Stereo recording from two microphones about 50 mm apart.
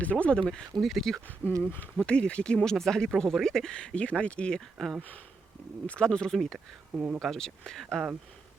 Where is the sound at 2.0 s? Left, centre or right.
Centre.